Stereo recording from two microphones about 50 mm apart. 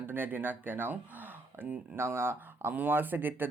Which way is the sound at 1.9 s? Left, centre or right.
Right.